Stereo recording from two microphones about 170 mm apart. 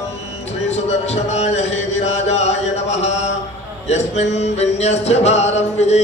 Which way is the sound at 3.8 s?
40° left (ahead or behind).